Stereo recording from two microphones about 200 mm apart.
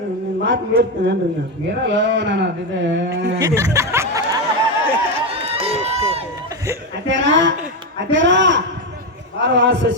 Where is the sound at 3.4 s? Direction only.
15° right (ahead or behind).